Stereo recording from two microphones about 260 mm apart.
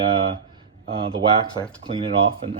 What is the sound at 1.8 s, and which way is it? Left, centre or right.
Mantra, right.